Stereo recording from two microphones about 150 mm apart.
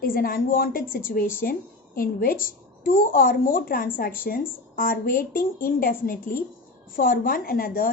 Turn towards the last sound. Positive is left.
turn(degrees=70)  # may be behind; listen again after turning